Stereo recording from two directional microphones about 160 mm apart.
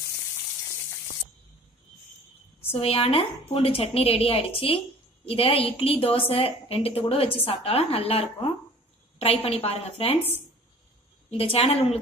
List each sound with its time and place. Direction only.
2.7 s a woman's voice: 35° left (ahead or behind)